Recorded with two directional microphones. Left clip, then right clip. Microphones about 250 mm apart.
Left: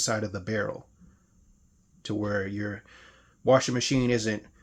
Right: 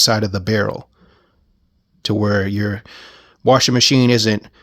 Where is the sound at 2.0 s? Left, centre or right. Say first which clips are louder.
Right 11 dB; right.